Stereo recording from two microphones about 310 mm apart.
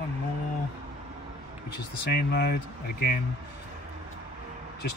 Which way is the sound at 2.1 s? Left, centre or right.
Left.